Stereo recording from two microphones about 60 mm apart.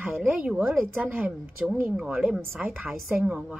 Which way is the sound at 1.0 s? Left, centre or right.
Right.